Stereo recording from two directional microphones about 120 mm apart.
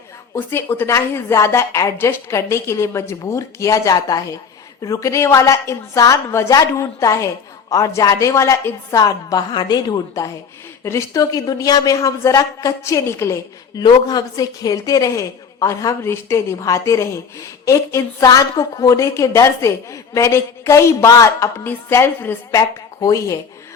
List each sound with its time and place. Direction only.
0.3 s a woman's voice: 15° left (ahead or behind)
13.8 s a woman's voice: 35° left (ahead or behind); by 22.4 s 15° left (ahead or behind)
22.5 s a woman's voice: 30° left (ahead or behind)